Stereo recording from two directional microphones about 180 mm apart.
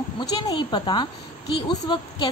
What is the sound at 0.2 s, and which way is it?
A woman's voice, 20° left (ahead or behind).